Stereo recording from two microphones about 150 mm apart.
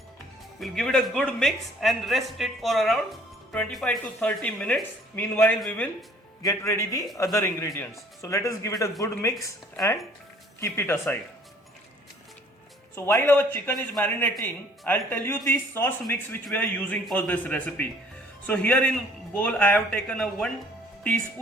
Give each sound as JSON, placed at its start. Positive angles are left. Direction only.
{"t": 0.6, "sound": "speech", "side_deg": 5}
{"t": 10.6, "sound": "speech", "side_deg": 15}
{"t": 13.1, "sound": "speech", "side_deg": 15}